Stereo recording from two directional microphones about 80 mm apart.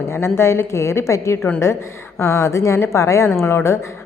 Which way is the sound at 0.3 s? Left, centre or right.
Left.